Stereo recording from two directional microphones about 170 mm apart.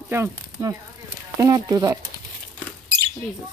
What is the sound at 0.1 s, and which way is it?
Speech, 15° right (ahead or behind).